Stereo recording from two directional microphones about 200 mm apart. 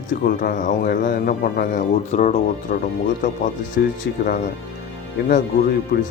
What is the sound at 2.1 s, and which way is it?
Speech, 35° left (ahead or behind).